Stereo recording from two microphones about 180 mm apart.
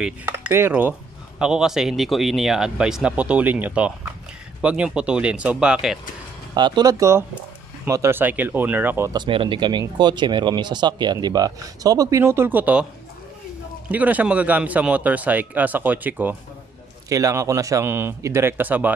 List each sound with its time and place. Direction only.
0.0 s speech: 10° right (ahead or behind)
6.5 s speech: 25° right (ahead or behind)
9.2 s speech: 30° right (ahead or behind); by 12.8 s 10° right (ahead or behind)
13.8 s speech: 10° right (ahead or behind)